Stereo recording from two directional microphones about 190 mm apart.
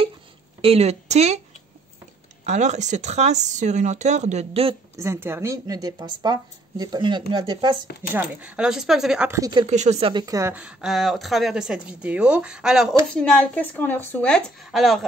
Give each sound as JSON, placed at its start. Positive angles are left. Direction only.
{"t": 0.6, "sound": "speech", "side_deg": -30}
{"t": 2.4, "sound": "speech", "side_deg": -40}
{"t": 4.9, "sound": "speech", "side_deg": -15}
{"t": 8.1, "sound": "a woman's voice", "side_deg": -5}
{"t": 9.4, "sound": "speech", "side_deg": -25}
{"t": 9.7, "sound": "a woman's voice", "side_deg": -35}